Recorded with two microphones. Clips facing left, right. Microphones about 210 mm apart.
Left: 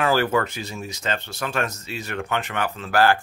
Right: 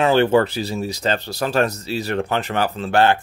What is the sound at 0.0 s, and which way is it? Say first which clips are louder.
Speech: right 6 dB; 25° right (ahead or behind).